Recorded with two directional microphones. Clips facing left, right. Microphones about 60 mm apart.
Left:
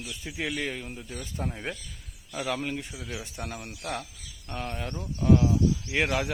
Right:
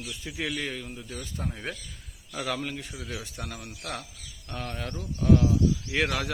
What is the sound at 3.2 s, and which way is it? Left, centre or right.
Speech, left.